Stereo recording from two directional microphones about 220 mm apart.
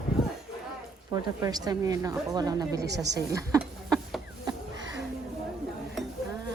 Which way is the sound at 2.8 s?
50° right (ahead or behind).